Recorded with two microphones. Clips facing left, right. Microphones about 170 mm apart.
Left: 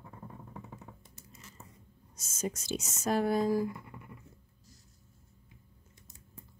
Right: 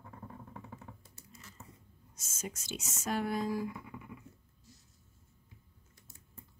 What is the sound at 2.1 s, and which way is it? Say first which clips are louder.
Speech: left 7 dB; 35° left (ahead or behind).